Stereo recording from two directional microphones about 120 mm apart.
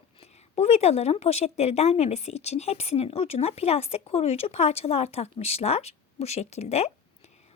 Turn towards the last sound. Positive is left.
turn(degrees=65)  # may be behind; listen again after turning